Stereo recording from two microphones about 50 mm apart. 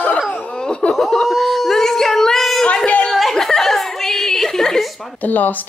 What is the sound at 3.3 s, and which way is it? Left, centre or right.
Chuckle, centre.